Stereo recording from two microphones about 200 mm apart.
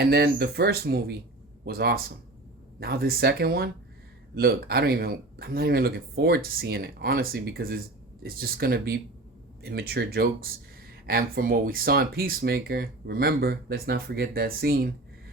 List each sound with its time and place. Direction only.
0.0 s speech: 55° right (ahead or behind)